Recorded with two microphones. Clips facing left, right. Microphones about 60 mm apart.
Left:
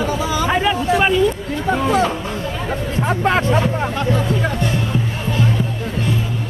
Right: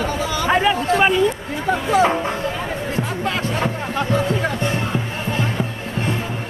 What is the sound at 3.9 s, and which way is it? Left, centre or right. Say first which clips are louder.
Music: left 1 dB; centre.